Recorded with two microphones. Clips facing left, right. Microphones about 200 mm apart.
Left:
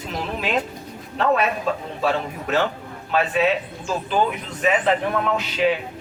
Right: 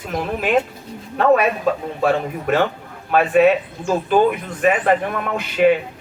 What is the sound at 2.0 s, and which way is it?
A man's voice, 50° right (ahead or behind).